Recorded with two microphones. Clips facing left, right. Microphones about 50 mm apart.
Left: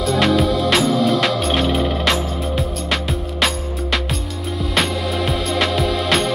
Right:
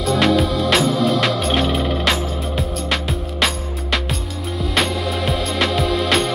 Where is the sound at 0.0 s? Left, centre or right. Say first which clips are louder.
Even; centre.